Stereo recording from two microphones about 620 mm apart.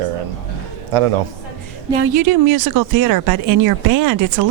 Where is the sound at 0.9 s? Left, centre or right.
Right.